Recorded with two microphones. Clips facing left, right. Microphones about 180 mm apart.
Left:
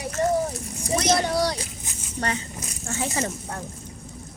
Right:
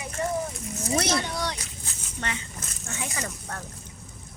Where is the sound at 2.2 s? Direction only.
40° left (ahead or behind).